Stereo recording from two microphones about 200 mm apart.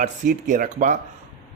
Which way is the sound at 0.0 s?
40° right (ahead or behind).